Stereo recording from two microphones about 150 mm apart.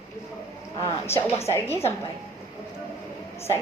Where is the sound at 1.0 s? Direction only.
15° left (ahead or behind).